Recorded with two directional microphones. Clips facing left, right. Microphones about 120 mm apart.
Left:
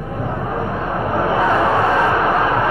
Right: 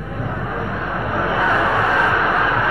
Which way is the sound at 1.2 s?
30° left (ahead or behind).